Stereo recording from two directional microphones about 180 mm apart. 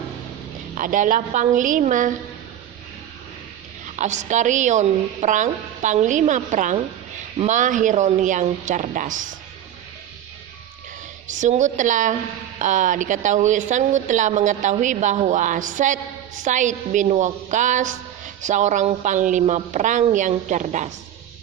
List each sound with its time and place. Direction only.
0.8 s a woman's voice: 45° right (ahead or behind)
3.8 s a woman's voice: 40° right (ahead or behind)
11.3 s a woman's voice: 45° right (ahead or behind)